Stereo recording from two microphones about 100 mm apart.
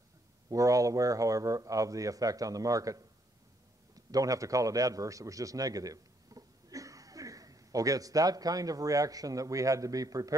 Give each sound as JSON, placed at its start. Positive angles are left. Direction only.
{"t": 0.5, "sound": "a man's voice", "side_deg": -35}